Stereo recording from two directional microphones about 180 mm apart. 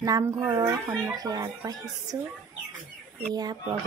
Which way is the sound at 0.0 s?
20° right (ahead or behind).